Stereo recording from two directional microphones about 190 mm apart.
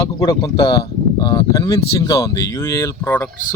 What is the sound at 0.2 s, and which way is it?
Speech, 25° left (ahead or behind).